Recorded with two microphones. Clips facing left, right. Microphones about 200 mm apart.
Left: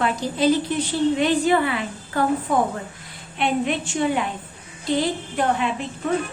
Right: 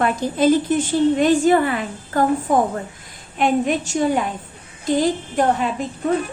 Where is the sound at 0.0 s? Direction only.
50° right (ahead or behind).